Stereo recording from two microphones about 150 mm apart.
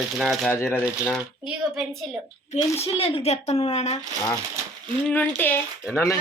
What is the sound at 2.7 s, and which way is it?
Speech, 40° left (ahead or behind).